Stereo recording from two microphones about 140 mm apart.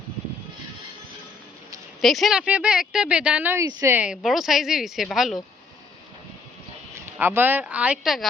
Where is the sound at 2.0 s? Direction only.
Centre (ahead or behind).